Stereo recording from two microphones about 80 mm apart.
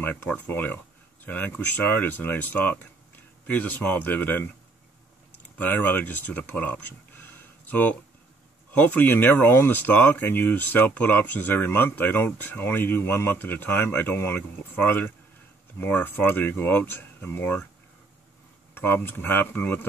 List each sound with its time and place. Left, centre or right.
0.0 s speech: left
5.6 s speech: left
18.8 s speech: left